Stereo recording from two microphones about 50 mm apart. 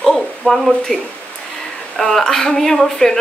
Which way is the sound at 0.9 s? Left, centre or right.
Centre.